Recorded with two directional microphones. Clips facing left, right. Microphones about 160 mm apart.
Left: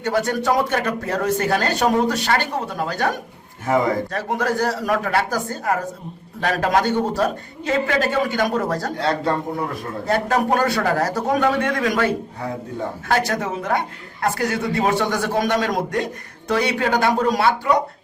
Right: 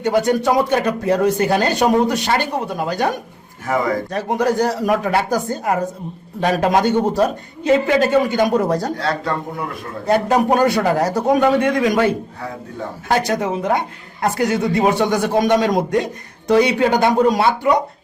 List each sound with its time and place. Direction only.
0.0 s speech: 15° right (ahead or behind)
4.1 s a man's voice: 15° right (ahead or behind)
9.0 s a man's voice: 25° left (ahead or behind)
10.1 s a man's voice: 15° right (ahead or behind)